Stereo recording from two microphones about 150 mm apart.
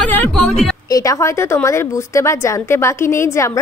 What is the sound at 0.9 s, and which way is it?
A woman's voice, 20° left (ahead or behind).